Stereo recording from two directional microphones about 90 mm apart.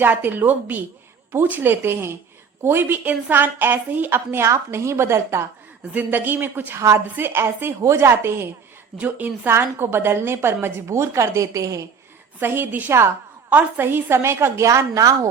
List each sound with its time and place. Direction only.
0.0 s a woman's voice: 20° right (ahead or behind)
6.7 s a woman's voice: 35° right (ahead or behind)
12.4 s a woman's voice: 25° right (ahead or behind)